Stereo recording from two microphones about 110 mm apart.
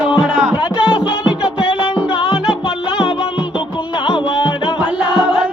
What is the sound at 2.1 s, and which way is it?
Music, 55° left (ahead or behind).